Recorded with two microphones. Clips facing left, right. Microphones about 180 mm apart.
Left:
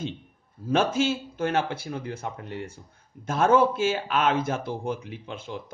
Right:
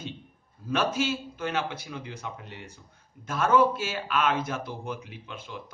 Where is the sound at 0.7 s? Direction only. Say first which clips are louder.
Left 4 dB; 50° left (ahead or behind).